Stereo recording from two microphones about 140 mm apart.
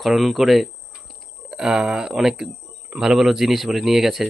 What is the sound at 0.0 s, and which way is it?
Speech, centre (ahead or behind).